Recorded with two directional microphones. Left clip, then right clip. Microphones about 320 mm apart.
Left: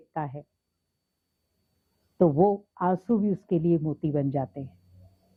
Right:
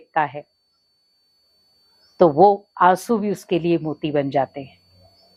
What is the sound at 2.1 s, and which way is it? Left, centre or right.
Speech, centre.